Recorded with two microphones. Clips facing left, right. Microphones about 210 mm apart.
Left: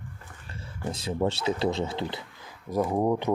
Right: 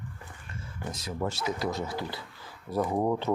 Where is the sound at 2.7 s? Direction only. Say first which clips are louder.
Left 2 dB; 10° left (ahead or behind).